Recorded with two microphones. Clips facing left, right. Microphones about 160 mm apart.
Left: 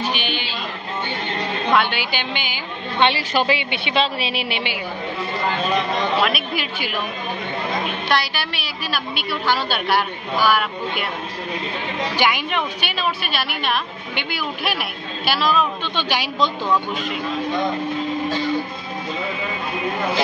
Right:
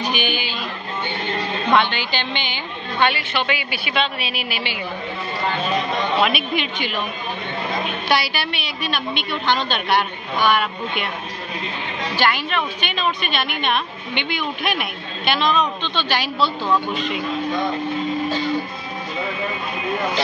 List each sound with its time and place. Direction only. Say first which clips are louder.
0.0 s music: right 1 dB; 15° right (ahead or behind)
1.7 s a woman's voice: right 1 dB; 5° left (ahead or behind)
3.0 s a woman's voice: left 2 dB; 30° left (ahead or behind)
6.2 s a woman's voice: right 2 dB; centre (ahead or behind)
8.1 s a woman's voice: right 2 dB; centre (ahead or behind)
12.2 s a woman's voice: right 1 dB; 15° left (ahead or behind)